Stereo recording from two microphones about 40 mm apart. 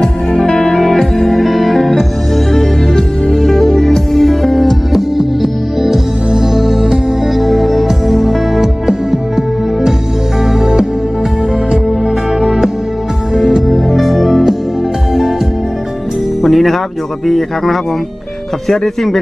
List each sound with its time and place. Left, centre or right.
0.0 s music: centre
5.1 s music: centre
10.6 s music: centre
12.4 s music: centre
16.4 s music: centre